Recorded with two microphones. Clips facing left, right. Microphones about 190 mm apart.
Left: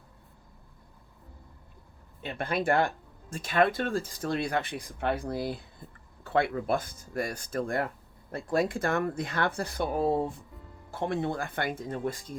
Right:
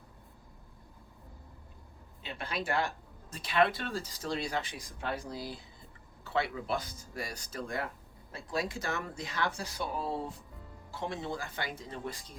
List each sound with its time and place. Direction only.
2.2 s speech: 55° left (ahead or behind)